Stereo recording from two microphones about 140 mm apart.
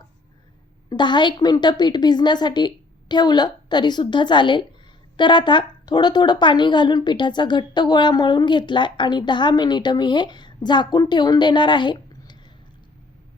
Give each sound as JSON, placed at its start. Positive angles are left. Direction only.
{"t": 0.9, "sound": "a woman's voice", "side_deg": 35}